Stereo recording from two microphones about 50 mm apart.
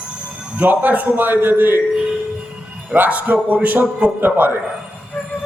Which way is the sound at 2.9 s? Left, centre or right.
Right.